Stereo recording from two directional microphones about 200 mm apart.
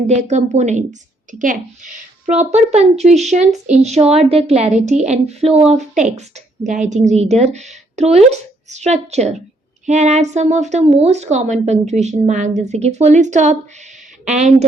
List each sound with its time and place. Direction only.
0.1 s speech: 35° right (ahead or behind)